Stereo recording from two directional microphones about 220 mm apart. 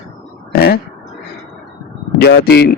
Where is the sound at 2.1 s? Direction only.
50° left (ahead or behind).